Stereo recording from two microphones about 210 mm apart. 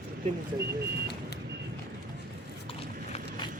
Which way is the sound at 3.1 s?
20° left (ahead or behind).